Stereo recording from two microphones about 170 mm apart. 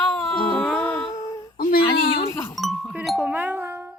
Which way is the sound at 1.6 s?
60° left (ahead or behind).